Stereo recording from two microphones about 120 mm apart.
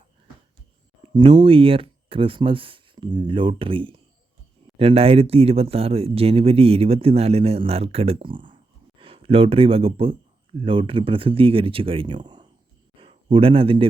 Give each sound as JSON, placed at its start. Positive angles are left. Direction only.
{"t": 1.0, "sound": "speech", "side_deg": -45}
{"t": 13.0, "sound": "speech", "side_deg": -50}